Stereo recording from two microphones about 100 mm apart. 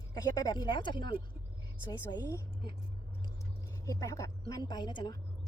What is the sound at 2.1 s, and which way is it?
Speech, 35° left (ahead or behind).